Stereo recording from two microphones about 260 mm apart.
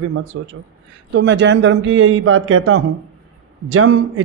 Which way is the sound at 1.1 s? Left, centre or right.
Right.